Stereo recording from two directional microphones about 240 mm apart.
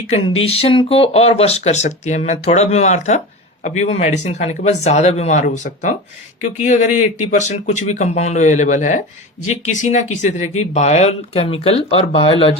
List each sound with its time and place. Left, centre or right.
0.1 s speech: left